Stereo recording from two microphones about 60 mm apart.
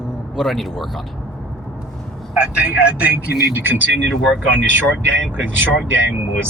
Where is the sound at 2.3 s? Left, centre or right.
Right.